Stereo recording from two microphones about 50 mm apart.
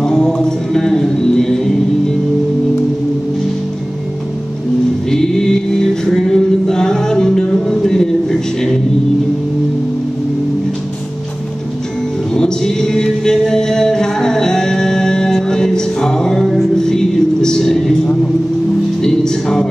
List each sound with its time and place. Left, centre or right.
0.0 s music: centre
5.1 s mantra: centre
6.0 s music: centre
12.4 s music: centre
19.0 s music: centre